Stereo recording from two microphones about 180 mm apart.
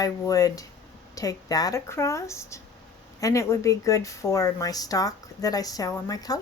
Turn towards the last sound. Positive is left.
turn(degrees=20)  # may be behind; listen again after turning